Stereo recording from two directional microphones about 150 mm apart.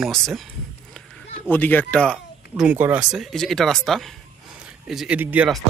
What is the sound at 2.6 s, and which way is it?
Speech, 10° right (ahead or behind).